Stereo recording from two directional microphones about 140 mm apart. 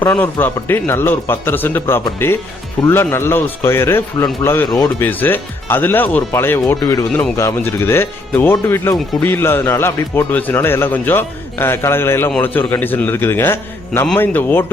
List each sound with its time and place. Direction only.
0.0 s speech: 15° left (ahead or behind)
6.8 s speech: 30° left (ahead or behind)
7.1 s speech: 15° left (ahead or behind)